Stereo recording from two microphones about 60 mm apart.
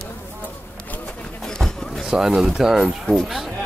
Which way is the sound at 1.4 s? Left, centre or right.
Centre.